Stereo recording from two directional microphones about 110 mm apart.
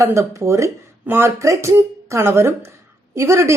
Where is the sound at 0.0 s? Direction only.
25° right (ahead or behind).